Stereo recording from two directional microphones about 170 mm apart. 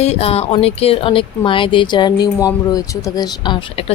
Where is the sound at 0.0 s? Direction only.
35° left (ahead or behind).